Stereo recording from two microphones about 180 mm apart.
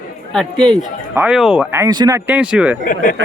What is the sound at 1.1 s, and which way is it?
Speech, 5° right (ahead or behind).